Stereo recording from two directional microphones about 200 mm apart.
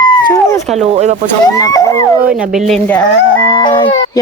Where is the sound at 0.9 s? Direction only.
35° right (ahead or behind).